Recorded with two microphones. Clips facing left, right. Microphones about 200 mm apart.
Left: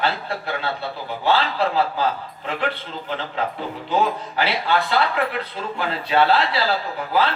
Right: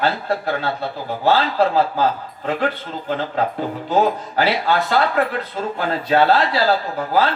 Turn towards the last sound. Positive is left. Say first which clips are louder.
# right 3 dB
turn(degrees=-45)  # may be behind; listen again after turning